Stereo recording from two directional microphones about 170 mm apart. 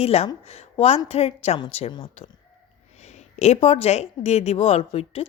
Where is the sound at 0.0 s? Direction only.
40° left (ahead or behind).